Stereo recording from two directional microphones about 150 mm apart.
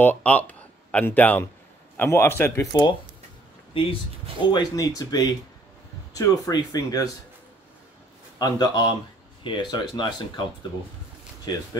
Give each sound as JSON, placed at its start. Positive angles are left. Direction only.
{"t": 0.0, "sound": "a man's voice", "side_deg": 10}
{"t": 2.7, "sound": "speech", "side_deg": 30}
{"t": 4.5, "sound": "speech", "side_deg": 25}
{"t": 8.4, "sound": "speech", "side_deg": 25}